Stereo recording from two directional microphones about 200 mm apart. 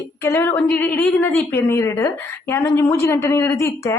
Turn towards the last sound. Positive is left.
turn(degrees=15)  # may be behind; listen again after turning